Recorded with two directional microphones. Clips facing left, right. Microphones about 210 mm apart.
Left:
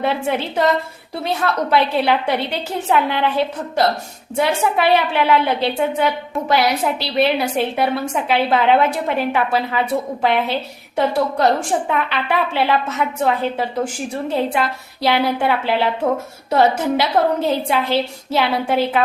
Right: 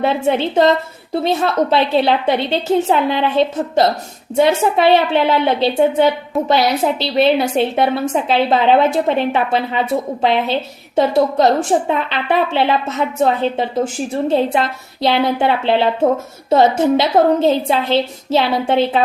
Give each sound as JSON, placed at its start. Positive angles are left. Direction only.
{"t": 0.0, "sound": "a woman's voice", "side_deg": -25}